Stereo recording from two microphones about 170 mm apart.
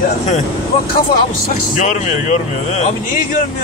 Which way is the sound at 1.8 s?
45° left (ahead or behind).